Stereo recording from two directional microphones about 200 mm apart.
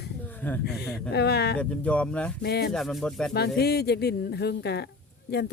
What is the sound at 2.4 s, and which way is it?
Speech, 55° left (ahead or behind).